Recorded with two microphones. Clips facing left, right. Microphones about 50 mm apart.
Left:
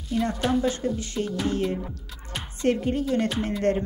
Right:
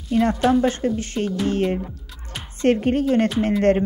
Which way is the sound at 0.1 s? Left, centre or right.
Right.